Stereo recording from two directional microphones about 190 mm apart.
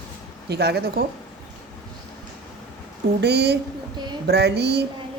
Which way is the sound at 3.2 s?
60° right (ahead or behind).